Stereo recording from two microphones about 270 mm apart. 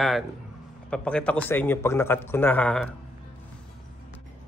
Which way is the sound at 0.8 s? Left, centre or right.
Centre.